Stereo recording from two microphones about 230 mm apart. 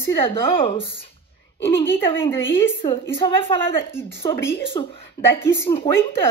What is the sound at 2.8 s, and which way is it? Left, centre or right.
Speech, left.